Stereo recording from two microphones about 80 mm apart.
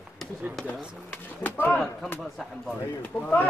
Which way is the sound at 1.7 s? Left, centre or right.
Centre.